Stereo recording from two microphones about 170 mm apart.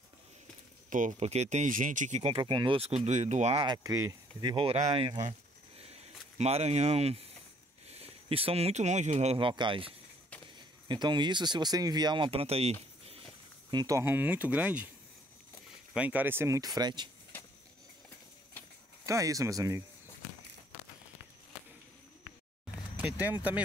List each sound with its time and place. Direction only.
0.8 s speech: 50° right (ahead or behind)
3.1 s speech: 45° right (ahead or behind)
3.6 s speech: 20° right (ahead or behind)
5.8 s a sound: 40° right (ahead or behind)
7.9 s speech: 35° right (ahead or behind)
13.7 s speech: 20° right (ahead or behind)
15.9 s speech: 10° right (ahead or behind); by 17.1 s 25° right (ahead or behind)
19.0 s speech: 20° right (ahead or behind)
22.9 s a sound: 10° right (ahead or behind)